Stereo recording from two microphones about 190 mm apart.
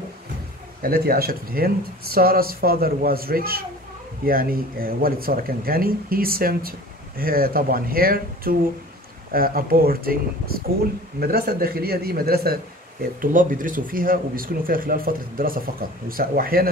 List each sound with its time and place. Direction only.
0.8 s speech: 50° right (ahead or behind)